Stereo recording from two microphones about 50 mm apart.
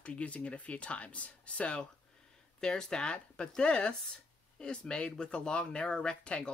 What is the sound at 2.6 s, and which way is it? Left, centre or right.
Speech, centre.